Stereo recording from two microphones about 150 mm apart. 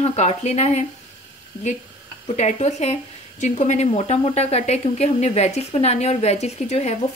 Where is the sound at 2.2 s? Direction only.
50° left (ahead or behind).